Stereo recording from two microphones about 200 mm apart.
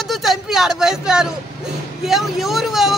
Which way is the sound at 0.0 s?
Centre (ahead or behind).